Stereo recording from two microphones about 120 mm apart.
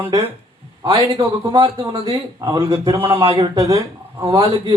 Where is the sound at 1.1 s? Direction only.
50° right (ahead or behind).